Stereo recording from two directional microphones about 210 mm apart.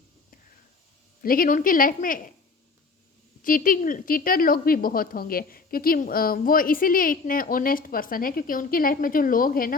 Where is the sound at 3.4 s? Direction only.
40° left (ahead or behind).